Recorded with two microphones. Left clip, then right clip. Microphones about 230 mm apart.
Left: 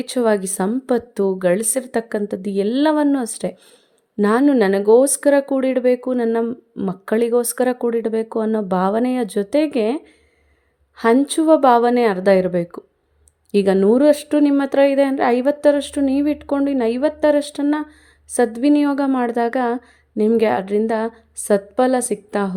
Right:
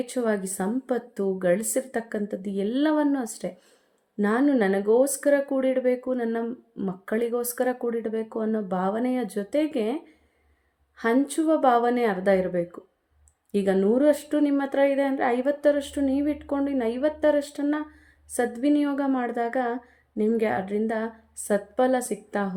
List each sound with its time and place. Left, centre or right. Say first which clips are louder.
0.0 s a woman's voice: left 8 dB; left